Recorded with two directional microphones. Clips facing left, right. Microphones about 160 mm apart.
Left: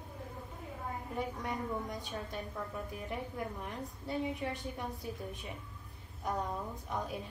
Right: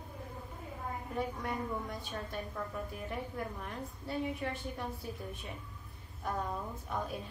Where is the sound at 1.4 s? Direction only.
20° left (ahead or behind).